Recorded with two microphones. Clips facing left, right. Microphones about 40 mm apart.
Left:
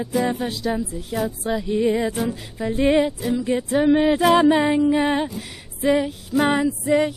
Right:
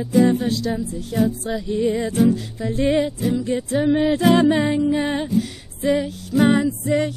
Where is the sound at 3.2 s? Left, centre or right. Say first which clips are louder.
Right 1 dB; centre.